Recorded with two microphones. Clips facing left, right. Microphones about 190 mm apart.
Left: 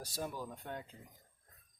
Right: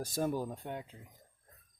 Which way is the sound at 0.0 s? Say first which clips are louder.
Right 8 dB; 50° right (ahead or behind).